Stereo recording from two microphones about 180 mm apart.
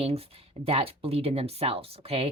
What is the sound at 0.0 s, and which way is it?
Speech, 35° right (ahead or behind).